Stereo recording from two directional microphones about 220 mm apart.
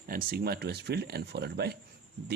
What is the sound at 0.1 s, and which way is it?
Speech, 45° right (ahead or behind).